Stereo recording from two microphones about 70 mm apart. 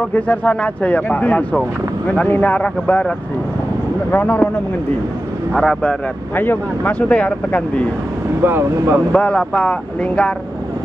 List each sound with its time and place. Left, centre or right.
0.1 s speech: left
4.1 s speech: left
5.5 s speech: centre
6.3 s speech: left
8.4 s speech: right
9.1 s speech: centre